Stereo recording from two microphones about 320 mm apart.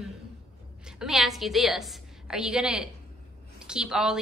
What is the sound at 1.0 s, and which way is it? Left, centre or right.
A woman's voice, centre.